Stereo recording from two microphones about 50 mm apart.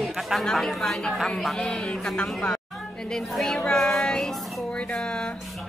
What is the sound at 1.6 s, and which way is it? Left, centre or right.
Child singing, centre.